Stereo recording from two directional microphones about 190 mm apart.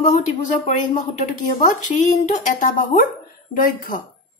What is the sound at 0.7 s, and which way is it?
A woman's voice, 40° left (ahead or behind).